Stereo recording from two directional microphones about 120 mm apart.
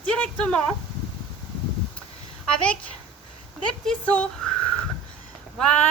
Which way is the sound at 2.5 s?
10° left (ahead or behind).